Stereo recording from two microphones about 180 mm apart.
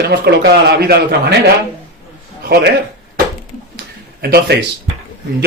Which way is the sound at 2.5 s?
60° right (ahead or behind).